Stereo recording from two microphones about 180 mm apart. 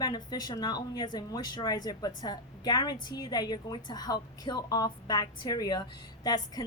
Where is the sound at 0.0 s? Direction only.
20° left (ahead or behind).